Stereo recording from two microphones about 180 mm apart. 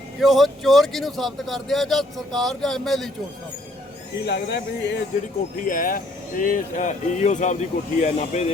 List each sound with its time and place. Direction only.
0.2 s speech: centre (ahead or behind)
4.3 s speech: 70° left (ahead or behind)
5.6 s speech: 50° left (ahead or behind)